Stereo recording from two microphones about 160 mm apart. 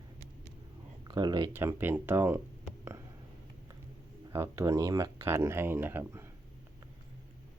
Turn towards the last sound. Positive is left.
turn(degrees=-15)  # may be behind; listen again after turning